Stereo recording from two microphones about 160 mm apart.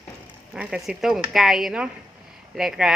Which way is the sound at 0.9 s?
Centre (ahead or behind).